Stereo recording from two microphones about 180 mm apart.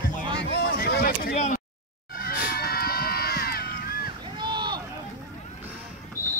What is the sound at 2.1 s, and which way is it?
Music, 55° left (ahead or behind).